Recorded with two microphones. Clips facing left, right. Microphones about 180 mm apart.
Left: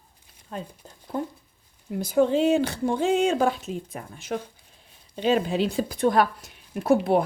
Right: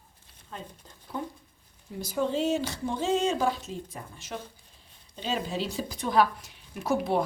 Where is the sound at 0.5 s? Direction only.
55° left (ahead or behind).